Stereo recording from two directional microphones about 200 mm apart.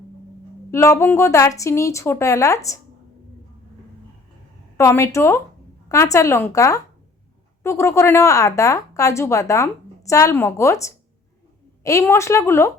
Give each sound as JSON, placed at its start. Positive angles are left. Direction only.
{"t": 0.7, "sound": "a woman's voice", "side_deg": 15}
{"t": 4.8, "sound": "a woman's voice", "side_deg": 15}